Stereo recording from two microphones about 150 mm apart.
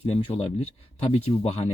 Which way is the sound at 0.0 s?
40° left (ahead or behind).